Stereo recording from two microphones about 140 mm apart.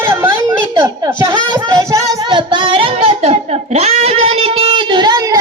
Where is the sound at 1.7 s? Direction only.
20° right (ahead or behind).